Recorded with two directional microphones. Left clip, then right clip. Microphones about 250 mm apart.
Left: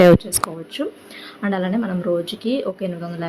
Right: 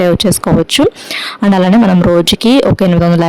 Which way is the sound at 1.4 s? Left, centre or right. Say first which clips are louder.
Right 13 dB; right.